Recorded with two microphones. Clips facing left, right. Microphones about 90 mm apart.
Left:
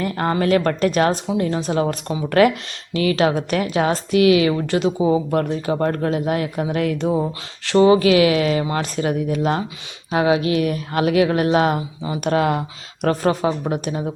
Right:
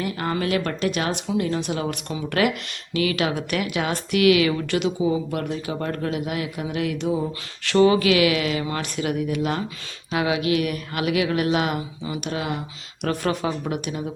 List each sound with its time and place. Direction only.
0.0 s speech: 40° left (ahead or behind)
7.2 s speech: 30° left (ahead or behind)
12.3 s speech: 55° left (ahead or behind)
13.1 s speech: 30° left (ahead or behind)